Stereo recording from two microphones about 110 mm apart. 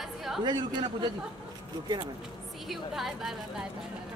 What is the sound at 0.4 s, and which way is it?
Speech, 45° right (ahead or behind).